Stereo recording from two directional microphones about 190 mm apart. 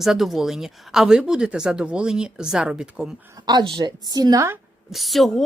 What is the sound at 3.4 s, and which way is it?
A woman's voice, 20° right (ahead or behind).